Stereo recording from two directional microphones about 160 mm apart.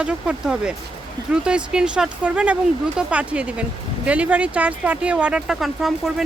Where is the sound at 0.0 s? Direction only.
5° right (ahead or behind).